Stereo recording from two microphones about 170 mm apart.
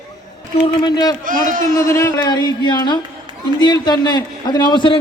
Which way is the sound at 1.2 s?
50° right (ahead or behind).